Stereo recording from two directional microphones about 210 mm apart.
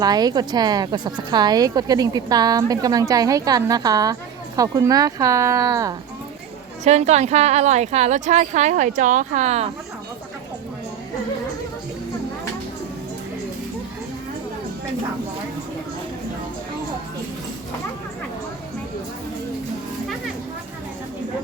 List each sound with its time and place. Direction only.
0.0 s a woman's voice: 20° right (ahead or behind)
6.8 s a woman's voice: 30° right (ahead or behind)